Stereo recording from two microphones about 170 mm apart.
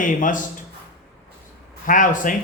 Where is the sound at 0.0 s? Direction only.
50° left (ahead or behind).